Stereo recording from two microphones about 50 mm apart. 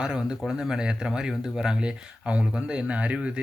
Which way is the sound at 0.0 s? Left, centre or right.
Centre.